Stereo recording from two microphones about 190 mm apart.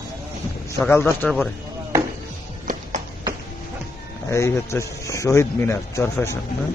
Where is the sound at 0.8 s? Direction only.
10° left (ahead or behind).